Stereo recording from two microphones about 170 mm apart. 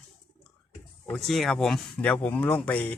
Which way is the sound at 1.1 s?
Centre (ahead or behind).